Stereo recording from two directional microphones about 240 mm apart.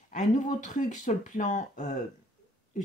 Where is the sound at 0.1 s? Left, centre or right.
Left.